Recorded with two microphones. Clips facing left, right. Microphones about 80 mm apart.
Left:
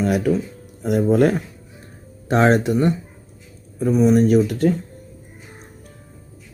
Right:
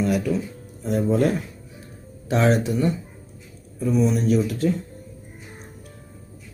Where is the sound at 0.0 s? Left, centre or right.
Left.